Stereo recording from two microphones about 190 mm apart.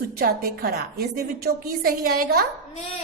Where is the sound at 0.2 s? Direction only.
55° right (ahead or behind).